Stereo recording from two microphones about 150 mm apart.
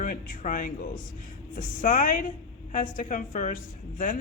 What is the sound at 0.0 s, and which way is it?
A woman's voice, 70° left (ahead or behind).